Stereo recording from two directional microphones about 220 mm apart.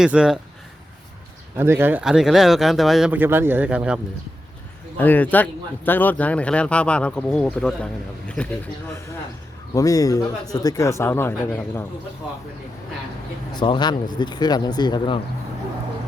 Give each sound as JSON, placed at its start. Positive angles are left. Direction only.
{"t": 0.0, "sound": "speech", "side_deg": -5}
{"t": 1.5, "sound": "speech", "side_deg": -10}
{"t": 4.9, "sound": "speech", "side_deg": 10}
{"t": 9.7, "sound": "a man's voice", "side_deg": 15}
{"t": 13.6, "sound": "speech", "side_deg": 20}